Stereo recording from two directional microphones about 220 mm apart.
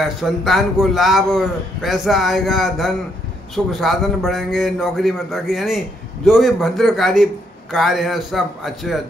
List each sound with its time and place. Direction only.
0.0 s a man's voice: centre (ahead or behind)